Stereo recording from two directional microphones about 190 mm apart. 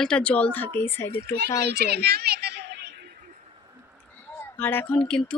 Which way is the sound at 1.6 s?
60° right (ahead or behind).